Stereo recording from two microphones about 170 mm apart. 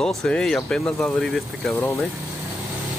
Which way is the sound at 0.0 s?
5° left (ahead or behind).